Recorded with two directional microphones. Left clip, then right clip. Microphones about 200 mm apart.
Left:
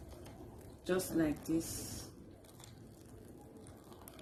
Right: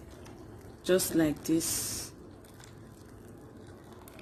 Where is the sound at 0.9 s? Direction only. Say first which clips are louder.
Right 8 dB; 40° right (ahead or behind).